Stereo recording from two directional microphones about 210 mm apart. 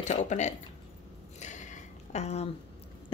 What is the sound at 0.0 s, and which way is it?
Speech, 35° left (ahead or behind).